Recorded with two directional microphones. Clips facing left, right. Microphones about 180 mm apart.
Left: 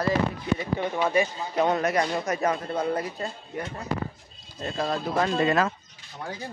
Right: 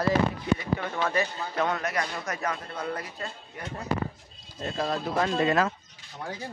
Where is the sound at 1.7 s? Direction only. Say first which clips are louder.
Left 6 dB; 25° left (ahead or behind).